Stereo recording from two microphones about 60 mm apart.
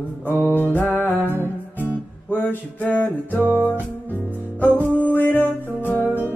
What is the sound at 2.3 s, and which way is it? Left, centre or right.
Music, left.